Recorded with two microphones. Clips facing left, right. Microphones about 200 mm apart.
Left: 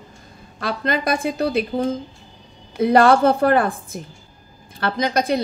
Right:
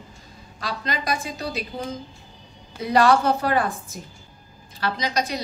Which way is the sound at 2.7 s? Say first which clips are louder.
Left 4 dB; 55° left (ahead or behind).